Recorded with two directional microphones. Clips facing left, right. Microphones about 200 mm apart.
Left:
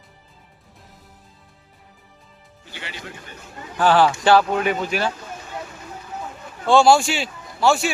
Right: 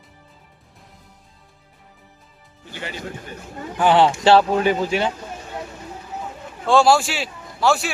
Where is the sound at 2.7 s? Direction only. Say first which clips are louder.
Right 5 dB; 45° right (ahead or behind).